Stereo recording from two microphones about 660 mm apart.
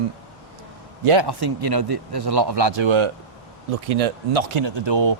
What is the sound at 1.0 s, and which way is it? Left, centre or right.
Speech, right.